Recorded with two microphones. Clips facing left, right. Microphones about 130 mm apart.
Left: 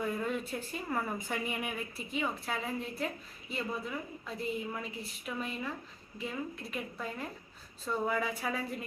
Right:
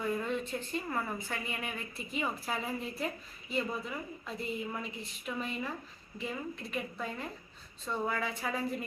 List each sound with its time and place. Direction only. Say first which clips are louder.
0.3 s a woman's voice: right 1 dB; 5° left (ahead or behind)
2.0 s a woman's voice: right 1 dB; centre (ahead or behind)